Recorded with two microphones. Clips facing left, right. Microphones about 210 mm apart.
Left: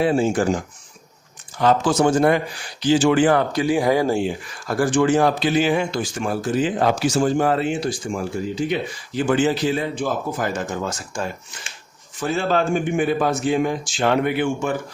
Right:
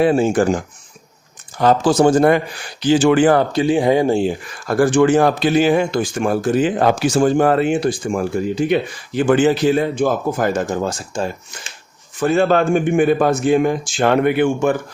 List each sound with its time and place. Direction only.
0.0 s speech: 55° right (ahead or behind)
1.5 s speech: 35° right (ahead or behind)
2.8 s speech: 60° right (ahead or behind)
3.3 s speech: 25° right (ahead or behind)
4.7 s speech: 60° right (ahead or behind); by 11.3 s 30° right (ahead or behind)
12.2 s speech: 55° right (ahead or behind)